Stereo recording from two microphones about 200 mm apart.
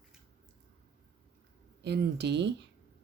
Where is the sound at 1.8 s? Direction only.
55° right (ahead or behind).